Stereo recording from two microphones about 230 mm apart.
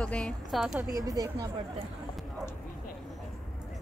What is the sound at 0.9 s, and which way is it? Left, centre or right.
Speech, centre.